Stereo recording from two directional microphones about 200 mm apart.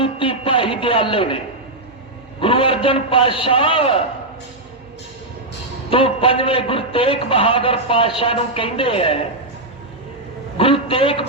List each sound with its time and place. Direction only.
0.0 s a sound: 25° left (ahead or behind)
2.4 s a man's voice: 25° left (ahead or behind)
5.9 s a man's voice: 25° left (ahead or behind)
10.6 s a man's voice: 25° left (ahead or behind)